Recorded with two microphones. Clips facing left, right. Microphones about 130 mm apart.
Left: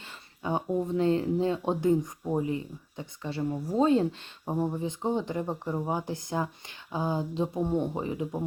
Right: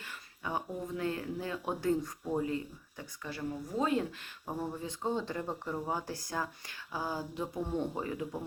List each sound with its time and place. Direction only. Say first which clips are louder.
0.4 s speech: left 8 dB; 30° left (ahead or behind)